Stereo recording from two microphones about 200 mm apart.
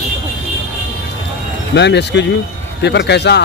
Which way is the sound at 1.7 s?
60° left (ahead or behind).